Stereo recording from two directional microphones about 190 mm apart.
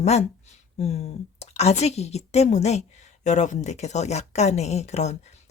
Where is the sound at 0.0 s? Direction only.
35° left (ahead or behind).